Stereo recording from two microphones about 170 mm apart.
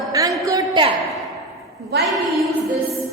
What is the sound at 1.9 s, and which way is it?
Speech, 85° right.